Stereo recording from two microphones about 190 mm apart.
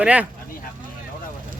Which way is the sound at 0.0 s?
5° right (ahead or behind).